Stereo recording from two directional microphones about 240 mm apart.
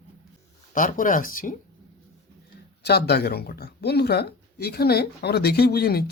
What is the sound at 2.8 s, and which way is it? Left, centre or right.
Speech, left.